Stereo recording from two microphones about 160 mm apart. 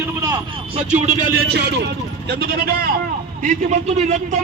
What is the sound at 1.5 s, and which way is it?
Speech, 90° right.